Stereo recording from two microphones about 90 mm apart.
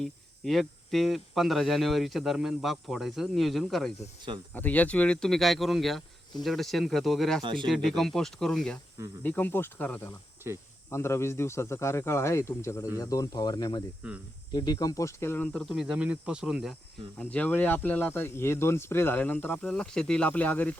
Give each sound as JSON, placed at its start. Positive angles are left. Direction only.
{"t": 0.0, "sound": "speech", "side_deg": 0}
{"t": 4.5, "sound": "speech", "side_deg": 20}
{"t": 7.4, "sound": "speech", "side_deg": -65}
{"t": 7.7, "sound": "speech", "side_deg": 0}
{"t": 9.2, "sound": "speech", "side_deg": 20}
{"t": 10.8, "sound": "speech", "side_deg": 30}
{"t": 15.7, "sound": "speech", "side_deg": -10}
{"t": 17.2, "sound": "speech", "side_deg": 20}
{"t": 19.6, "sound": "speech", "side_deg": 5}